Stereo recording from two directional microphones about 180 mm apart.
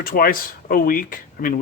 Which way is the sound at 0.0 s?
50° left (ahead or behind).